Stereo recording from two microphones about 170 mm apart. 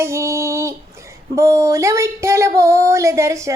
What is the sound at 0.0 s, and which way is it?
Child singing, 15° right (ahead or behind).